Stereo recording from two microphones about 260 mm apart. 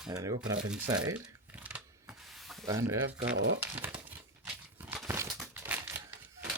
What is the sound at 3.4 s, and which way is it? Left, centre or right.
Speech, right.